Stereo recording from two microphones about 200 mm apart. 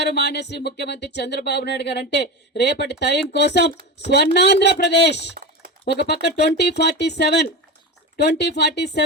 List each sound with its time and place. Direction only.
0.0 s speech: 55° left (ahead or behind)